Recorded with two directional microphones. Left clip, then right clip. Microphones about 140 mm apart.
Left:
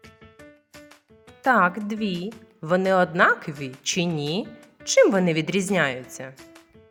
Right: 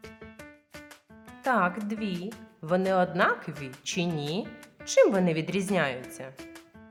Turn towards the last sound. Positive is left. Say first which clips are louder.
# left 5 dB
turn(degrees=35)  # may be behind; listen again after turning